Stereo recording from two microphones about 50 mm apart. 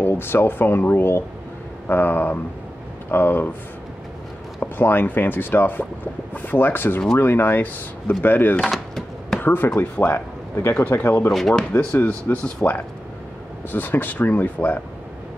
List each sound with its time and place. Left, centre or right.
0.0 s speech: left
4.6 s speech: left
8.6 s a sound: centre
9.4 s speech: left
11.7 s speech: left